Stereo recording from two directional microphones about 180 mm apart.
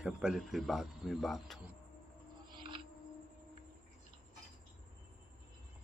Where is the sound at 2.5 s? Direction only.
25° right (ahead or behind).